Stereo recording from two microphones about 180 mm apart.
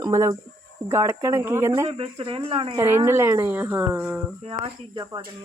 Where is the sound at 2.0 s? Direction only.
30° right (ahead or behind).